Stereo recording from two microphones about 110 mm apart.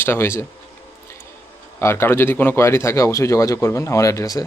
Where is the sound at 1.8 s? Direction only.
25° left (ahead or behind).